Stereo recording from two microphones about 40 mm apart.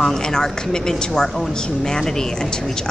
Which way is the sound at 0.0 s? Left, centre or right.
Centre.